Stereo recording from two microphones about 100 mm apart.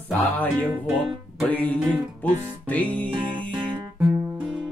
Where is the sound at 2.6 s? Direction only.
15° left (ahead or behind).